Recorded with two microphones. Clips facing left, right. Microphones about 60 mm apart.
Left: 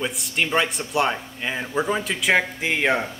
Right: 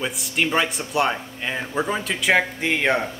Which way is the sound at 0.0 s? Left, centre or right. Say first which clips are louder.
Right 1 dB; centre.